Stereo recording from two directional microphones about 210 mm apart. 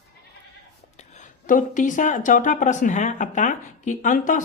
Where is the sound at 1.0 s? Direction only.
35° left (ahead or behind).